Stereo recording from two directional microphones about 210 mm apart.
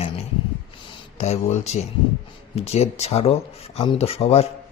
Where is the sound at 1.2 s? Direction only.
30° left (ahead or behind).